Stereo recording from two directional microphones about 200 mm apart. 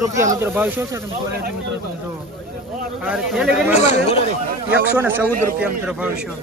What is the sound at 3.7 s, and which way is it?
Speech, 35° left (ahead or behind).